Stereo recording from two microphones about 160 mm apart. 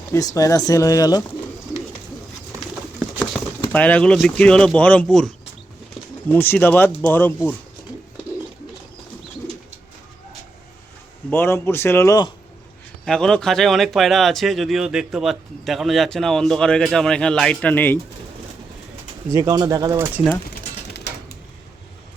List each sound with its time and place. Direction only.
0.1 s speech: 20° left (ahead or behind)
3.0 s patter: 5° left (ahead or behind)
3.7 s speech: 10° left (ahead or behind)
6.3 s speech: 10° left (ahead or behind)
11.3 s speech: 15° left (ahead or behind)
13.1 s speech: 5° left (ahead or behind)
19.3 s speech: 20° right (ahead or behind)
20.9 s a sound: 90° left